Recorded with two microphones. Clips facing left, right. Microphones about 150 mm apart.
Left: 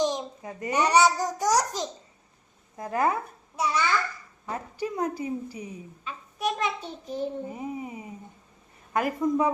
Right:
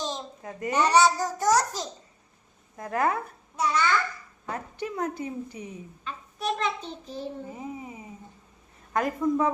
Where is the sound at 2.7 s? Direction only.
25° left (ahead or behind).